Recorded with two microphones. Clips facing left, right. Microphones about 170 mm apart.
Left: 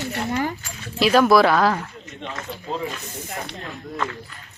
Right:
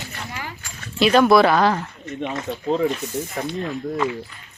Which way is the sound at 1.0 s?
Centre (ahead or behind).